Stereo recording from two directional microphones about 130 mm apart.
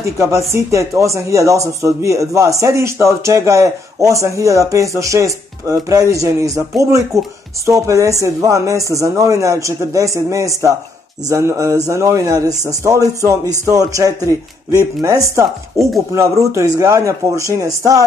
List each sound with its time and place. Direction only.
0.0 s speech: 20° right (ahead or behind)